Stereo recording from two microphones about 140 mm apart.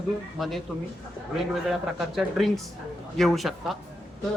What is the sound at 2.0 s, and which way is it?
A woman's voice, centre (ahead or behind).